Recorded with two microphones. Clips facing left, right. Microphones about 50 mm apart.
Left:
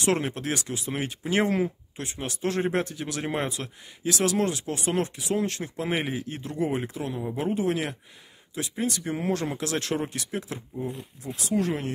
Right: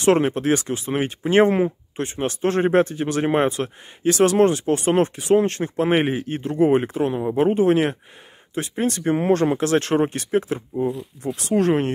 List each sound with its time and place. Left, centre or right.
0.0 s speech: right
11.0 s speech: right